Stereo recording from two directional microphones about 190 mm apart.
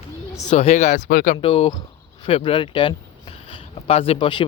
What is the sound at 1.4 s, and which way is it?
Speech, 25° left (ahead or behind).